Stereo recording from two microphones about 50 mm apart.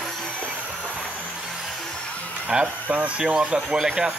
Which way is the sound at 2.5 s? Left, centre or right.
Centre.